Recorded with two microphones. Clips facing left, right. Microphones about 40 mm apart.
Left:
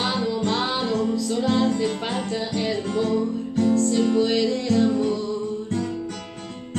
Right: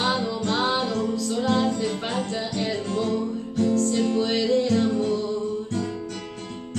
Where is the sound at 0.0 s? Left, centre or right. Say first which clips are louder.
Left 1 dB; centre.